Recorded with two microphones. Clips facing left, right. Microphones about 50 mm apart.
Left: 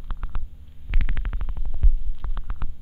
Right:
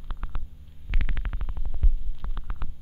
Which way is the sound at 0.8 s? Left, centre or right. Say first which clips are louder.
Left 1 dB; centre.